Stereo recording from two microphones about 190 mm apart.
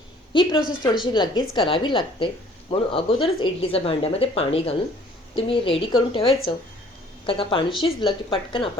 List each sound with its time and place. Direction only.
0.3 s a woman's voice: 25° left (ahead or behind)